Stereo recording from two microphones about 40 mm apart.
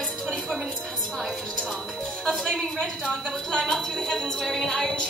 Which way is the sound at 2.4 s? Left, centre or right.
Centre.